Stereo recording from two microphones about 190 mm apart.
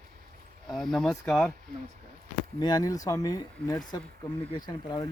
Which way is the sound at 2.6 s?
20° left (ahead or behind).